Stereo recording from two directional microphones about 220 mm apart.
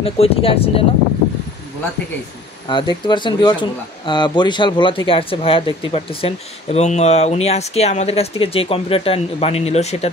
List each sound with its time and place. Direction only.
0.0 s speech: 25° left (ahead or behind)
2.7 s speech: 20° left (ahead or behind)